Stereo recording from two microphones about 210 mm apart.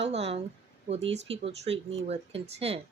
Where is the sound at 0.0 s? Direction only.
30° right (ahead or behind).